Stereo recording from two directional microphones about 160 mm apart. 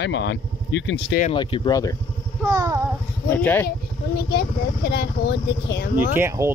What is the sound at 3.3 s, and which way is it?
Speech, 15° left (ahead or behind).